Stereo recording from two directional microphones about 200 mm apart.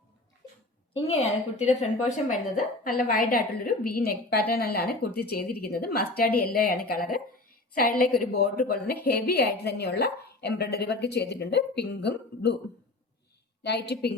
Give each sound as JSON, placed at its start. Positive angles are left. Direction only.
{"t": 0.9, "sound": "a woman's voice", "side_deg": 30}
{"t": 2.8, "sound": "a woman's voice", "side_deg": 45}
{"t": 13.6, "sound": "a woman's voice", "side_deg": 55}